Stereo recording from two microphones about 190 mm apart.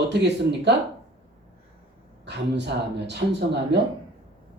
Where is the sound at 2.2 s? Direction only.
65° right (ahead or behind).